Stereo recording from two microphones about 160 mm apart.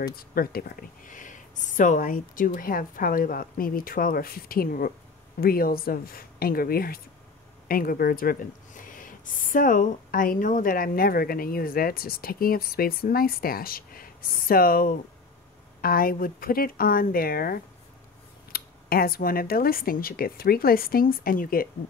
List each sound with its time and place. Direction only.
0.1 s speech: 65° left (ahead or behind)